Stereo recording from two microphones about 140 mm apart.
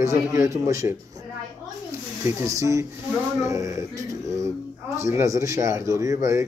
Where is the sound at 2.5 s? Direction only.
20° right (ahead or behind).